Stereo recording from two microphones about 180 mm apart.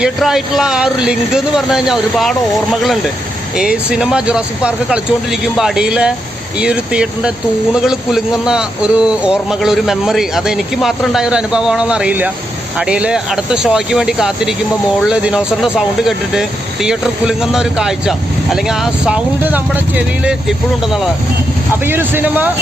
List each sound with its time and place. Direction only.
0.0 s speech: centre (ahead or behind)
3.6 s speech: 5° right (ahead or behind)
21.8 s speech: 10° right (ahead or behind)